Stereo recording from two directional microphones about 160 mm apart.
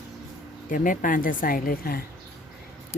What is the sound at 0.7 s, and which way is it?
Speech, 55° left (ahead or behind).